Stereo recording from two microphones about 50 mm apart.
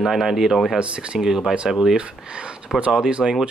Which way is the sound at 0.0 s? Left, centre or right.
Centre.